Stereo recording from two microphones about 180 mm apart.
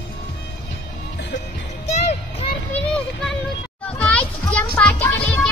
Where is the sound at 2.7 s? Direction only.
5° left (ahead or behind).